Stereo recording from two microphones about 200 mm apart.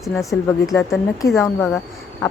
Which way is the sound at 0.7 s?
15° left (ahead or behind).